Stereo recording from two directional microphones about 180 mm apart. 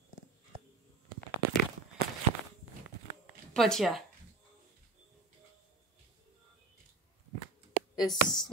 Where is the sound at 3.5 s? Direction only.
Centre (ahead or behind).